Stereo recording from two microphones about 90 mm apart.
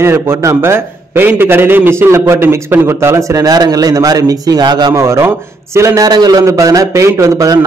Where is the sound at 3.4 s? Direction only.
45° right (ahead or behind).